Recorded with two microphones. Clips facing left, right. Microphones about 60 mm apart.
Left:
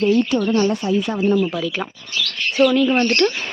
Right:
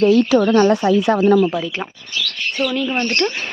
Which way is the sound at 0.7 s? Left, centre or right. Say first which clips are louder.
Right 5 dB; right.